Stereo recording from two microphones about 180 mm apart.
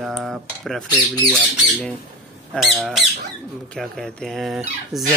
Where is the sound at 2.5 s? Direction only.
Centre (ahead or behind).